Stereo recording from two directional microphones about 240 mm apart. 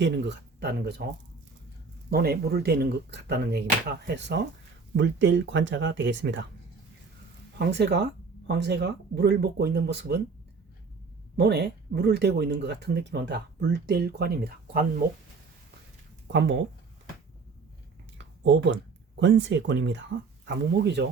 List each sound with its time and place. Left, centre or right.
0.0 s speech: right
2.0 s speech: right
7.6 s speech: right
11.3 s speech: right
18.2 s a sound: right
19.2 s speech: right